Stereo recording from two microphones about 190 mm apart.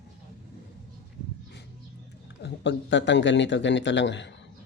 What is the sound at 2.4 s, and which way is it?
A man's voice, 70° left (ahead or behind).